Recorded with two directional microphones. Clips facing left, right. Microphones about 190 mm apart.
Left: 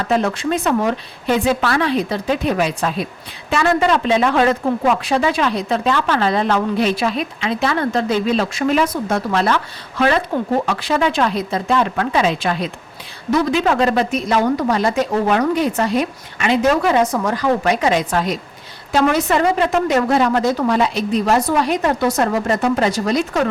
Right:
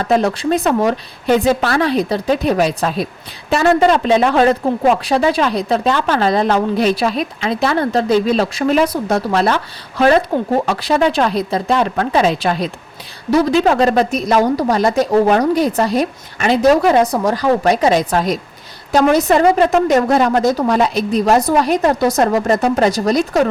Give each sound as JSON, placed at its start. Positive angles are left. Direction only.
{"t": 0.0, "sound": "a woman's voice", "side_deg": -35}